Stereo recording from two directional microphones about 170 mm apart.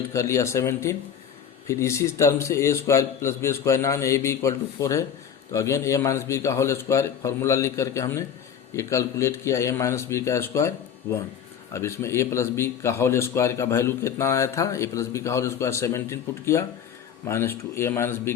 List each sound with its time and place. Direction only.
0.1 s a man's voice: 20° left (ahead or behind)
11.7 s a man's voice: 15° left (ahead or behind)